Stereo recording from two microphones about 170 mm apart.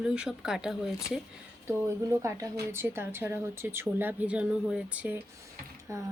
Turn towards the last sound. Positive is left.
turn(degrees=-15)  # may be behind; listen again after turning